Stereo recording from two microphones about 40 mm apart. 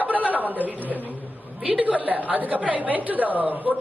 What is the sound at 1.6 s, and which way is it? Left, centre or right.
A woman's voice, right.